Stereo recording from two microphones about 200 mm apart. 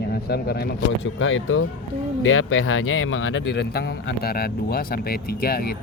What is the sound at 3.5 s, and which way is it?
A man's voice, 55° left (ahead or behind).